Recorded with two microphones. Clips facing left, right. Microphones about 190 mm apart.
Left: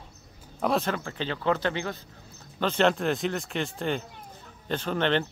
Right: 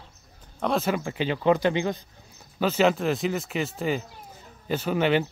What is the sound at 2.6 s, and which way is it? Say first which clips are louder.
Speech: right 2 dB; 5° right (ahead or behind).